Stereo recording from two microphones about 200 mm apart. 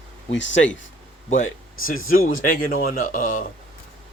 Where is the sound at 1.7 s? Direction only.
90° left.